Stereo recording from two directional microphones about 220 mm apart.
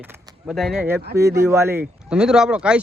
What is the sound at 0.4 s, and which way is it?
Speech, centre (ahead or behind).